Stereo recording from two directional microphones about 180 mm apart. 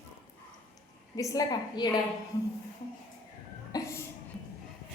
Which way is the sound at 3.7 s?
20° left (ahead or behind).